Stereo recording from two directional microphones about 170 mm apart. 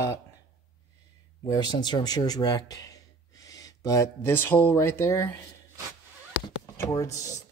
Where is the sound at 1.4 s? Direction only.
25° left (ahead or behind).